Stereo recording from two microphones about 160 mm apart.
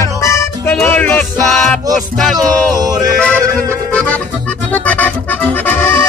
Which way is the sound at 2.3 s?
25° right (ahead or behind).